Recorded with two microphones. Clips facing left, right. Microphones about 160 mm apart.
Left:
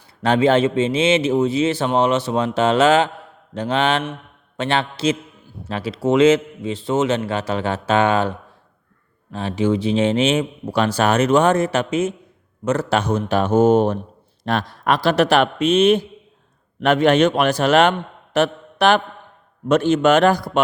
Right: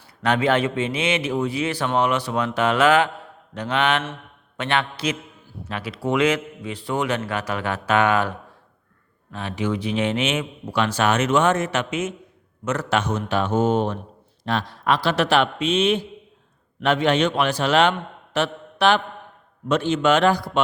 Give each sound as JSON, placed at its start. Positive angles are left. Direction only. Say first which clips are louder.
{"t": 0.2, "sound": "a man's voice", "louder": "left 5 dB", "side_deg": 30}
{"t": 9.3, "sound": "a man's voice", "louder": "left 6 dB", "side_deg": 30}
{"t": 18.3, "sound": "mantra", "louder": "left 5 dB", "side_deg": 50}
{"t": 19.6, "sound": "a man's voice", "louder": "left 4 dB", "side_deg": 45}